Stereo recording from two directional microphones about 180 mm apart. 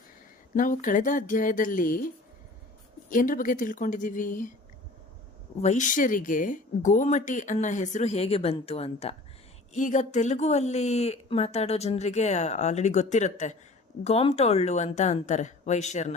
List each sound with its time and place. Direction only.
0.5 s speech: 50° left (ahead or behind)
3.1 s speech: 50° left (ahead or behind)
5.6 s speech: 45° left (ahead or behind)